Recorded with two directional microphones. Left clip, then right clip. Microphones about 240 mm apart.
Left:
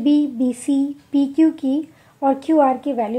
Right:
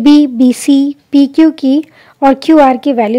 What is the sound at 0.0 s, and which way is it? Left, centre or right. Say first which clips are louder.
A woman's voice: right 11 dB; right.